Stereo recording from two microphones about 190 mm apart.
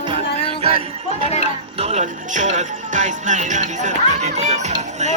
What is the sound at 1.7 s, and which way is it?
Music, 35° right (ahead or behind).